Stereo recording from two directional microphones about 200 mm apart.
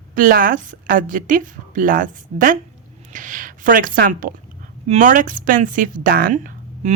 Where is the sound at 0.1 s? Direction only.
45° right (ahead or behind).